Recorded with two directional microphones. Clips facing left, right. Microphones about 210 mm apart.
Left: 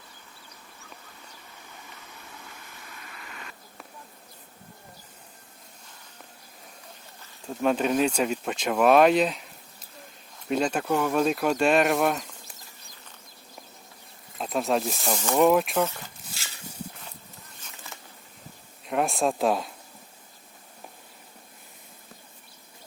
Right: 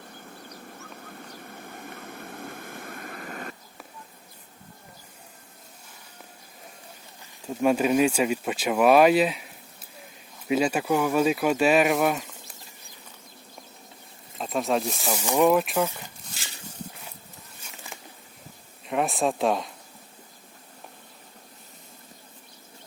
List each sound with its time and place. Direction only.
0.0 s a sound: 55° right (ahead or behind)
7.2 s speech: 10° right (ahead or behind)
10.5 s speech: 5° right (ahead or behind)
14.3 s speech: centre (ahead or behind)
15.4 s speech: centre (ahead or behind)
17.9 s a sound: 15° right (ahead or behind)
18.9 s speech: centre (ahead or behind)